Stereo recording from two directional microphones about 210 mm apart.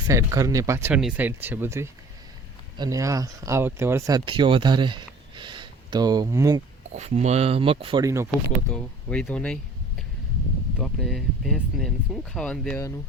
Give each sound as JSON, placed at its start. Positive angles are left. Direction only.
{"t": 0.1, "sound": "speech", "side_deg": -15}
{"t": 6.9, "sound": "speech", "side_deg": -35}
{"t": 8.7, "sound": "speech", "side_deg": 5}
{"t": 10.8, "sound": "speech", "side_deg": 0}